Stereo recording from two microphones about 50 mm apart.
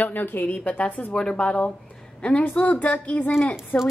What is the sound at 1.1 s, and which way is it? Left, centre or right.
A woman's voice, centre.